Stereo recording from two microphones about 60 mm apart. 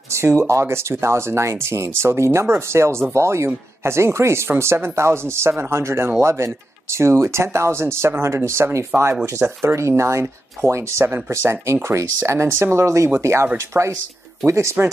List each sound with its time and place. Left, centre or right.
0.1 s speech: right